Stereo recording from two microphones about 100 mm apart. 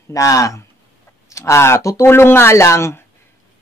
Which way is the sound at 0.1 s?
35° left (ahead or behind).